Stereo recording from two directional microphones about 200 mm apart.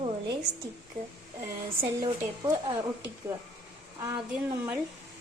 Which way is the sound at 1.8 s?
20° right (ahead or behind).